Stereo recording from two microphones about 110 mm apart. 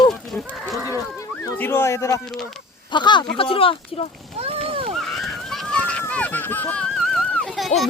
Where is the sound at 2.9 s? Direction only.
45° left (ahead or behind).